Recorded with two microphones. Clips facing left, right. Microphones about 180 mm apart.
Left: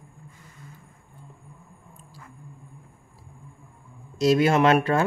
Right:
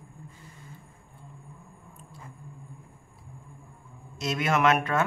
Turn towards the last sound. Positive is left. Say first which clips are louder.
# left 4 dB
turn(degrees=30)  # may be behind; listen again after turning